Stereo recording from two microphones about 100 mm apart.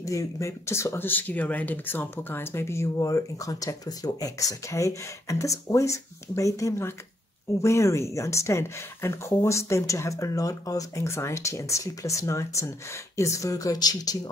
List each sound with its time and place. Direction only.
0.0 s speech: 35° left (ahead or behind)